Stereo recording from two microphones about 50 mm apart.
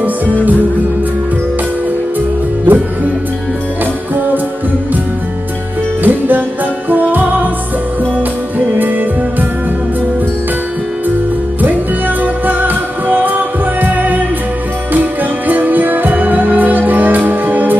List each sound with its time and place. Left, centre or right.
2.7 s music: right
6.0 s music: right
8.7 s music: right
12.2 s music: right